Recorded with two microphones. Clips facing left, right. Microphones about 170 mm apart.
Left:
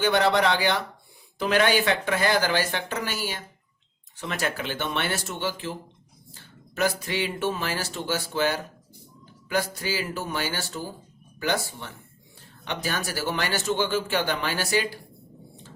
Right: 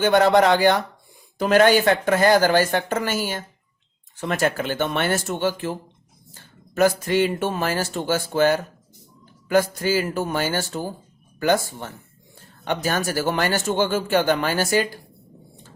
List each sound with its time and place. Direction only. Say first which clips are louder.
0.0 s speech: right 6 dB; 45° right (ahead or behind)